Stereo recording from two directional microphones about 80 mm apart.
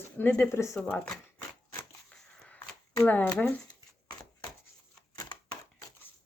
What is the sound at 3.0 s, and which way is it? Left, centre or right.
Speech, left.